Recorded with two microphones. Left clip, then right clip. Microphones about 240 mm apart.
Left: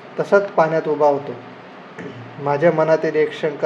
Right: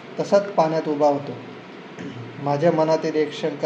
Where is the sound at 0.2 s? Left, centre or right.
Left.